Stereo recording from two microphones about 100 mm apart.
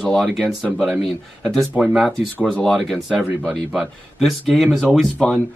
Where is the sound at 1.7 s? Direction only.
10° right (ahead or behind).